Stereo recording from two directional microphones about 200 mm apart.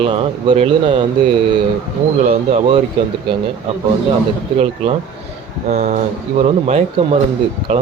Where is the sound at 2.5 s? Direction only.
30° right (ahead or behind).